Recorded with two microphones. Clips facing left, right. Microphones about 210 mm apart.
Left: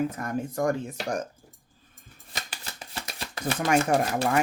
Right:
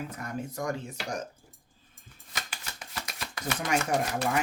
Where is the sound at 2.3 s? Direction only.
30° left (ahead or behind).